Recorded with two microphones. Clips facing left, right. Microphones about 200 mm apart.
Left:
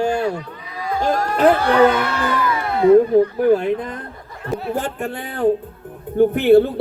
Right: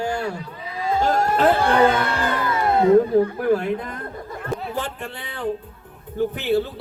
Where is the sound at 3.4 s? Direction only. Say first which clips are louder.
Left 5 dB; 20° left (ahead or behind).